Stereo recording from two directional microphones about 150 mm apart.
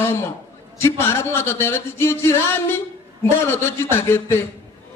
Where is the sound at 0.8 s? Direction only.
15° left (ahead or behind).